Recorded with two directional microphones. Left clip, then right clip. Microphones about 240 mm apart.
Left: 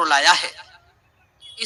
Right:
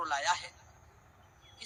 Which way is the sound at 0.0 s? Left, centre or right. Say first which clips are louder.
Left 16 dB; left.